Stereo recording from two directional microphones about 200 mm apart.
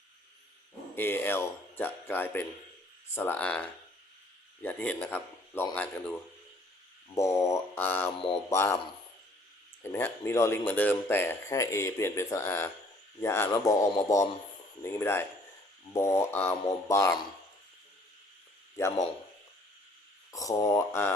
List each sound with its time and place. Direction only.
0.9 s speech: 10° left (ahead or behind)
7.2 s speech: 15° left (ahead or behind)
9.8 s speech: 10° left (ahead or behind)
20.3 s speech: 15° left (ahead or behind)